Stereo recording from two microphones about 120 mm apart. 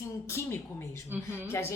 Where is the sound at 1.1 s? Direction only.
15° right (ahead or behind).